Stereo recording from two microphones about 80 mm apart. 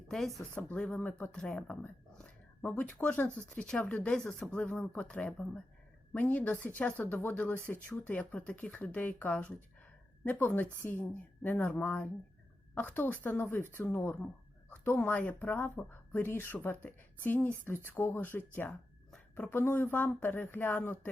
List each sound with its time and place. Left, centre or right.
0.1 s speech: centre
0.5 s a woman's voice: centre